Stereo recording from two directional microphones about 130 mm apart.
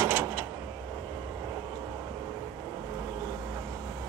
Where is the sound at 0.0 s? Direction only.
20° right (ahead or behind).